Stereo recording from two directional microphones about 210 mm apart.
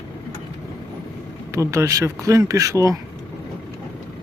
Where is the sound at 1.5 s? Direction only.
15° right (ahead or behind).